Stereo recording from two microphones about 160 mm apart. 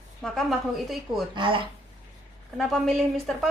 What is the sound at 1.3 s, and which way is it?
Music, 30° right (ahead or behind).